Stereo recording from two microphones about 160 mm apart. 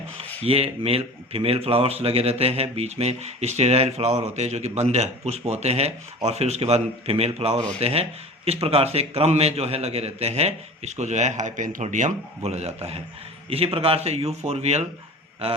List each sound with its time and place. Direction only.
0.4 s speech: 35° right (ahead or behind)